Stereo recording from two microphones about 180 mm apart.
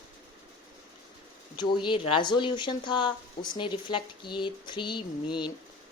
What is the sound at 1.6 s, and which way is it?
Speech, 25° left (ahead or behind).